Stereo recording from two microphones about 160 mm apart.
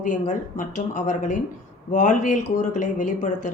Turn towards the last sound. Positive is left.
turn(degrees=50)  # may be behind; listen again after turning